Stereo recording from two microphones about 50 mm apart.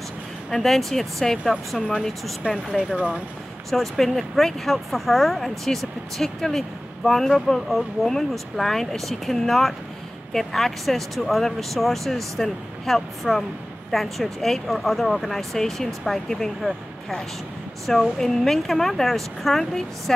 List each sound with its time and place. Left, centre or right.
0.5 s speech: centre
2.9 s speech: right
3.7 s speech: centre